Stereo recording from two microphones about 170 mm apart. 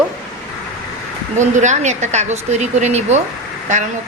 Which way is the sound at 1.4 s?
45° right (ahead or behind).